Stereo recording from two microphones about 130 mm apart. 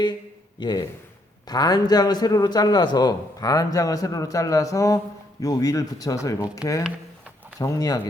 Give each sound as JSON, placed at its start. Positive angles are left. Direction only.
{"t": 0.6, "sound": "a man's voice", "side_deg": 35}